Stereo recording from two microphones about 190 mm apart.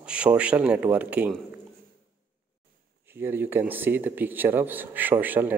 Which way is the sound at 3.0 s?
10° right (ahead or behind).